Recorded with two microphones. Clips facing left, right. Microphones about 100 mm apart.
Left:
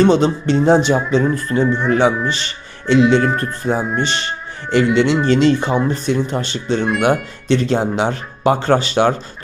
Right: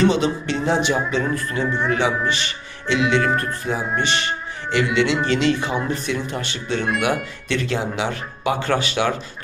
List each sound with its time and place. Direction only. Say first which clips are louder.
0.0 s speech: left 5 dB; 35° left (ahead or behind)